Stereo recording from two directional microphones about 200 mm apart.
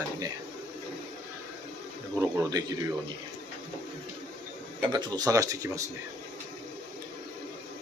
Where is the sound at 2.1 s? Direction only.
15° right (ahead or behind).